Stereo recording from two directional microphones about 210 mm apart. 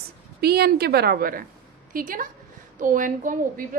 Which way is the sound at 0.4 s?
50° right (ahead or behind).